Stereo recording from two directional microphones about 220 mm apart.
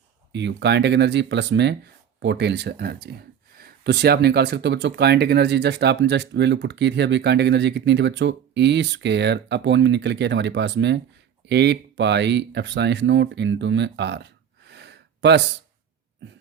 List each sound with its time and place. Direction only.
0.3 s speech: 50° right (ahead or behind)